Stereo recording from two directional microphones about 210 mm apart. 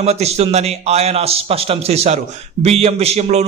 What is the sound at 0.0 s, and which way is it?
A man's voice, 30° right (ahead or behind).